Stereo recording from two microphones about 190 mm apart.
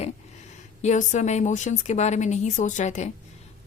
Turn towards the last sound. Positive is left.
turn(degrees=40)  # may be behind; listen again after turning